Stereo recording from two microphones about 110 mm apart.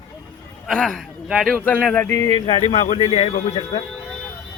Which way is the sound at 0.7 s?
5° left (ahead or behind).